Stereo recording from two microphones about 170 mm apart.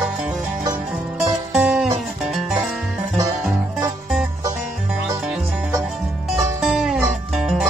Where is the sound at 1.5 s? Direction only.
5° right (ahead or behind).